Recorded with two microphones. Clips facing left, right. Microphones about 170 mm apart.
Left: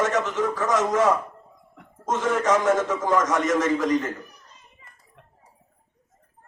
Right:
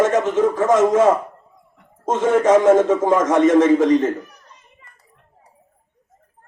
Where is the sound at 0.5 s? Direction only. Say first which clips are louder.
Right 7 dB; 25° right (ahead or behind).